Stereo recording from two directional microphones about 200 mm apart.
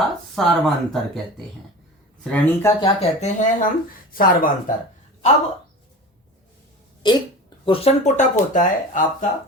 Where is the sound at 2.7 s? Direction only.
30° left (ahead or behind); by 4.7 s 45° left (ahead or behind).